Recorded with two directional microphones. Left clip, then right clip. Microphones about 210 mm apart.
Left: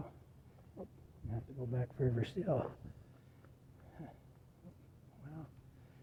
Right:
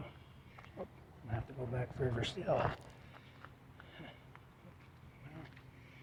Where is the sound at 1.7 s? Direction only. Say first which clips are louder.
Even; 35° left (ahead or behind).